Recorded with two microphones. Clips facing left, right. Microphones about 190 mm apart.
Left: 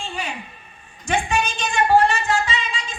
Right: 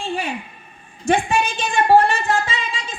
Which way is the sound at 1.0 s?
55° right (ahead or behind).